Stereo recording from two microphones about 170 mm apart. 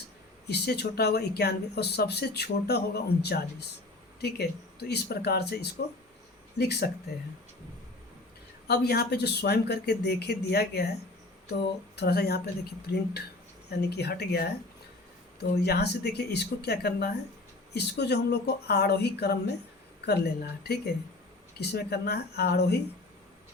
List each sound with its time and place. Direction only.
0.5 s speech: 75° left (ahead or behind)
8.6 s speech: 70° left (ahead or behind)
11.9 s speech: 70° left (ahead or behind)